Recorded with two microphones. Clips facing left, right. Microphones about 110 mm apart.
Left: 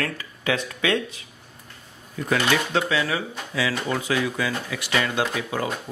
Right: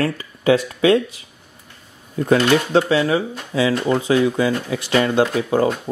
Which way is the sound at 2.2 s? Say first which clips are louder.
Right 7 dB; 35° right (ahead or behind).